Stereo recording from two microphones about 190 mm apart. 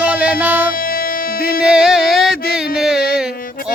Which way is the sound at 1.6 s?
5° right (ahead or behind).